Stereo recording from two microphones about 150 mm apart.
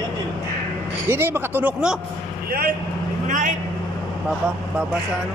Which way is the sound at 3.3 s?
60° right (ahead or behind).